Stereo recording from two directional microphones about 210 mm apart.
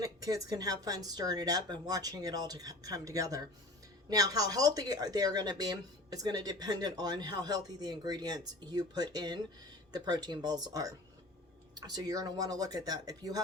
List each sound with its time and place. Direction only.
0.0 s speech: 15° right (ahead or behind)